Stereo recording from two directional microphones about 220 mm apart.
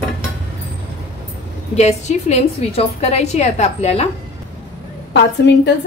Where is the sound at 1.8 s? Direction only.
30° left (ahead or behind).